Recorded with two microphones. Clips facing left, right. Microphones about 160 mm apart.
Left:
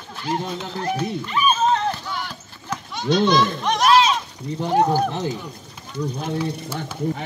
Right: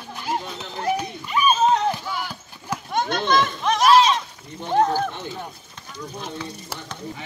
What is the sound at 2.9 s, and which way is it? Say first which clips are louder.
Speech: left 3 dB; 50° right (ahead or behind).